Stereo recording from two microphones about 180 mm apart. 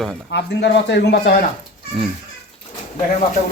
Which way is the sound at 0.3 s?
70° left (ahead or behind).